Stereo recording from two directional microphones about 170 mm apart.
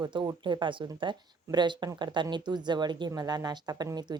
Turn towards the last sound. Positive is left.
turn(degrees=-25)  # may be behind; listen again after turning